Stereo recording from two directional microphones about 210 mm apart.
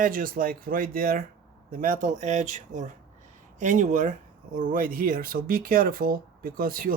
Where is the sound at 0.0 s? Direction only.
40° right (ahead or behind).